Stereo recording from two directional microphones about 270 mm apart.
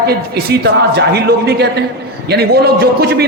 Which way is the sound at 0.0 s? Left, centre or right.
Right.